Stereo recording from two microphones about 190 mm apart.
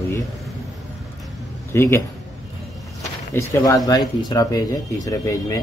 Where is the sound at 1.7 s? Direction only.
10° left (ahead or behind).